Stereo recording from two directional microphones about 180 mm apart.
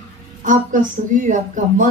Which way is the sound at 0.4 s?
45° right (ahead or behind).